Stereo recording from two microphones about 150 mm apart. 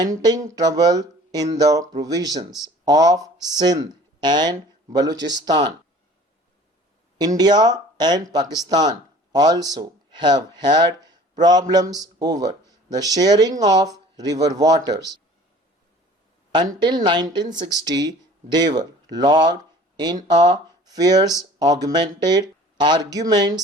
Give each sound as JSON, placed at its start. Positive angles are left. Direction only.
{"t": 0.0, "sound": "speech", "side_deg": -25}
{"t": 7.3, "sound": "speech", "side_deg": -25}
{"t": 11.0, "sound": "a sound", "side_deg": -25}
{"t": 11.7, "sound": "speech", "side_deg": -25}
{"t": 16.5, "sound": "speech", "side_deg": -30}
{"t": 20.1, "sound": "speech", "side_deg": -50}
{"t": 20.5, "sound": "speech", "side_deg": -25}